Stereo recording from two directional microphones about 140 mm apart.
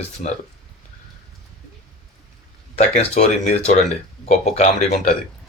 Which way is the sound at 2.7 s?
55° left (ahead or behind).